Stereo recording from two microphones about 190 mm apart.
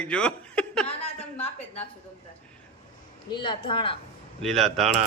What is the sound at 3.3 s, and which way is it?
Speech, 25° left (ahead or behind).